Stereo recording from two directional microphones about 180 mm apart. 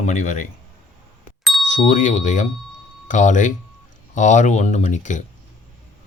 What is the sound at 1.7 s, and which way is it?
Speech, 40° left (ahead or behind).